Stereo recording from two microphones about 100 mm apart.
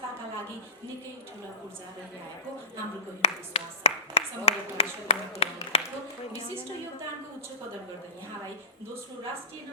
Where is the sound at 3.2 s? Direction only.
90° left.